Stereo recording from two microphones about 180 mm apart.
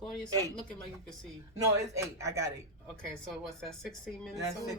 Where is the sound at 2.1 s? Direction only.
15° right (ahead or behind).